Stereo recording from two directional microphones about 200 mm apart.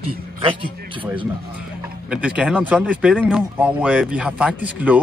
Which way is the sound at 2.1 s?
5° right (ahead or behind).